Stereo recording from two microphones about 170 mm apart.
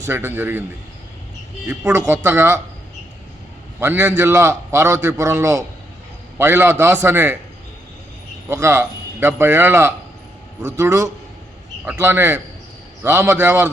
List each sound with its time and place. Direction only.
0.1 s a man's voice: 10° right (ahead or behind)
1.6 s a man's voice: 15° right (ahead or behind)
3.8 s a man's voice: 15° right (ahead or behind)
8.4 s a man's voice: 15° right (ahead or behind)